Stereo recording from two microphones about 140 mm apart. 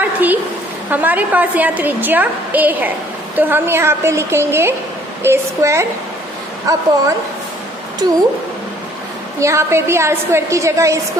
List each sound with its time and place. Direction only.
0.0 s a sound: 10° right (ahead or behind)
0.9 s a woman's voice: 10° right (ahead or behind)
8.0 s speech: 30° right (ahead or behind)
9.4 s a woman's voice: 20° right (ahead or behind)